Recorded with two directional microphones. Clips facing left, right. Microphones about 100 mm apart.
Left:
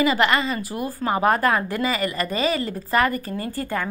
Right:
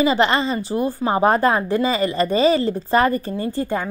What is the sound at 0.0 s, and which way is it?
A woman's voice, 30° right (ahead or behind).